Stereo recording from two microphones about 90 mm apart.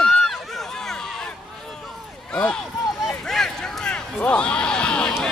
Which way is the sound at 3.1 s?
5° left (ahead or behind).